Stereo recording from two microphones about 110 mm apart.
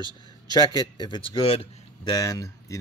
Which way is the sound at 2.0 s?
35° left (ahead or behind).